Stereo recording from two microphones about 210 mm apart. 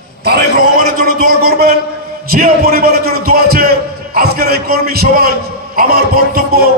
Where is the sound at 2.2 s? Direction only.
45° right (ahead or behind).